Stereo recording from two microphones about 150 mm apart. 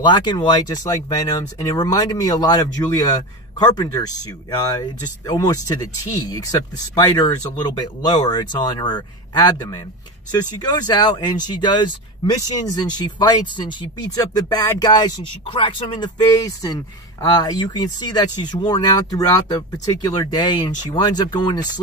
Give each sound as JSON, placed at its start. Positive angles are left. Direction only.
{"t": 0.0, "sound": "speech", "side_deg": 30}
{"t": 7.0, "sound": "speech", "side_deg": 25}